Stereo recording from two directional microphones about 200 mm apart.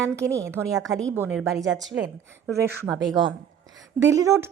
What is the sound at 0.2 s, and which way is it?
Speech, 15° right (ahead or behind).